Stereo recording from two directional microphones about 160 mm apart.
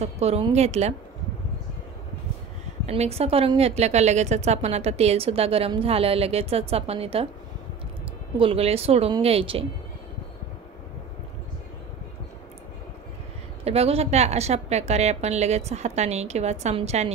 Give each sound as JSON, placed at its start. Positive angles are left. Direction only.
{"t": 0.0, "sound": "a woman's voice", "side_deg": -40}
{"t": 2.9, "sound": "a woman's voice", "side_deg": -40}
{"t": 8.4, "sound": "a woman's voice", "side_deg": -35}
{"t": 13.7, "sound": "a woman's voice", "side_deg": -40}